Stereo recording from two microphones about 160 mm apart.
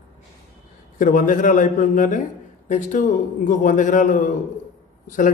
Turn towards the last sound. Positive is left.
turn(degrees=55)  # may be behind; listen again after turning